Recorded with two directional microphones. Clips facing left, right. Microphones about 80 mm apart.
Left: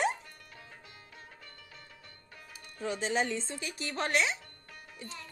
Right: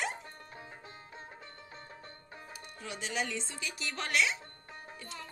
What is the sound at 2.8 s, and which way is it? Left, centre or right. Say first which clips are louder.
Speech: left 6 dB; left.